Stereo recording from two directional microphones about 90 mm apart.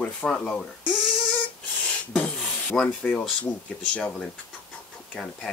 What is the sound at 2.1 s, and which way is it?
Rub, 10° left (ahead or behind).